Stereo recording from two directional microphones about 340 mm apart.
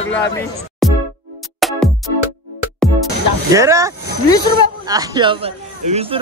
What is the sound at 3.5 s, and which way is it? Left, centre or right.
Speech, centre.